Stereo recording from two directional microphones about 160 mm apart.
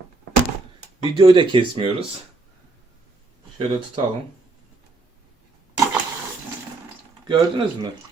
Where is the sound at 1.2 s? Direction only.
30° right (ahead or behind).